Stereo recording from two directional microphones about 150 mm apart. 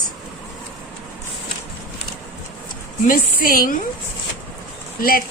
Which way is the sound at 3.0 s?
70° left (ahead or behind).